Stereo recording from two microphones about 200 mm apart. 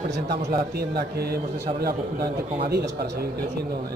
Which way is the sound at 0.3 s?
50° right (ahead or behind).